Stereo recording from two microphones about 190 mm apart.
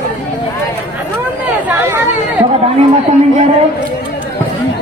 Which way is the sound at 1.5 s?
15° right (ahead or behind).